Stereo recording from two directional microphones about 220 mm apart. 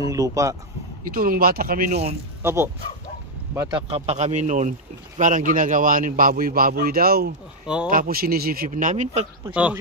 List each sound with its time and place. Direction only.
0.0 s speech: 15° right (ahead or behind)
1.1 s a man's voice: 40° right (ahead or behind)
2.4 s a man's voice: 10° right (ahead or behind); by 7.3 s 45° right (ahead or behind)
7.6 s speech: 5° right (ahead or behind)
7.9 s a man's voice: 40° right (ahead or behind)
9.5 s speech: 5° right (ahead or behind)